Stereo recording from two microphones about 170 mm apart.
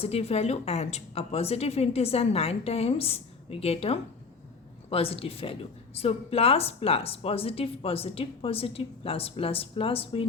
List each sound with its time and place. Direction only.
0.0 s speech: 35° left (ahead or behind)